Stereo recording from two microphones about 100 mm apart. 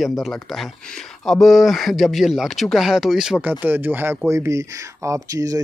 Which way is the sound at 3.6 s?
20° right (ahead or behind).